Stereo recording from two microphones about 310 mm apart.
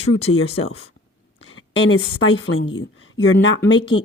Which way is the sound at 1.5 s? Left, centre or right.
Left.